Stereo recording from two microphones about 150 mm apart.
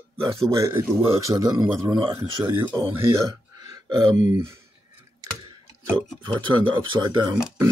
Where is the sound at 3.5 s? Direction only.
25° right (ahead or behind).